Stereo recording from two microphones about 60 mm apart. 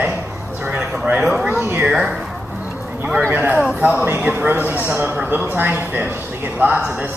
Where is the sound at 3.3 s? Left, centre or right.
Right.